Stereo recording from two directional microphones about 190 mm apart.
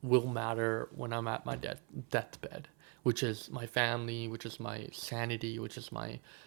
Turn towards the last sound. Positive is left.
turn(degrees=-15)  # may be behind; listen again after turning